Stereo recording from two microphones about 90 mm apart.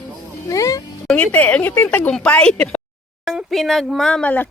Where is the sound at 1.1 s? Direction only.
15° left (ahead or behind).